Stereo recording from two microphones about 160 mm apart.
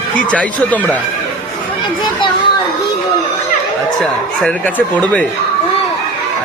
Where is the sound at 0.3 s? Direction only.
10° left (ahead or behind).